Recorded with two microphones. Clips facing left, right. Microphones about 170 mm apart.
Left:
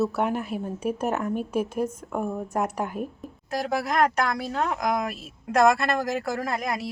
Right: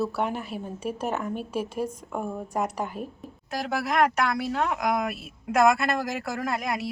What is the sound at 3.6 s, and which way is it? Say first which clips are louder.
Speech: left 1 dB; centre (ahead or behind).